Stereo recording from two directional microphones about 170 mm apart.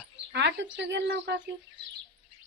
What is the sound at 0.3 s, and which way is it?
Speech, 90° right.